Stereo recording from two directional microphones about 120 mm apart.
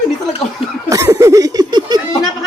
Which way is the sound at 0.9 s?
25° right (ahead or behind).